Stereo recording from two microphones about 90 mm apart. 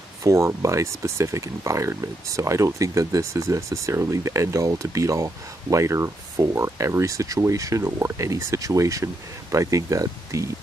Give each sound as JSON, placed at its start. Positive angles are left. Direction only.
{"t": 0.2, "sound": "speech", "side_deg": -35}